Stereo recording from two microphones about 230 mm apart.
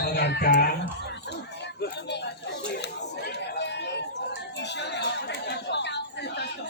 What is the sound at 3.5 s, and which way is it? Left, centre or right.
Chatter, left.